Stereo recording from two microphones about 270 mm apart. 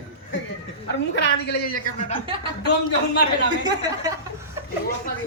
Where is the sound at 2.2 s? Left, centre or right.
Centre.